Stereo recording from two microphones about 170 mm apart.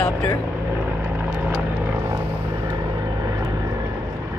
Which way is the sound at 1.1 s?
10° right (ahead or behind).